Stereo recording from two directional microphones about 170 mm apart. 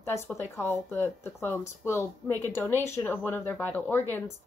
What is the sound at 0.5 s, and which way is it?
Speech, 15° left (ahead or behind).